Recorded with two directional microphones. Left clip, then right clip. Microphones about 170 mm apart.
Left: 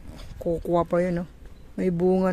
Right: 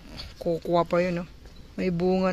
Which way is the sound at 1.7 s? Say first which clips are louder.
Left 3 dB; 25° left (ahead or behind).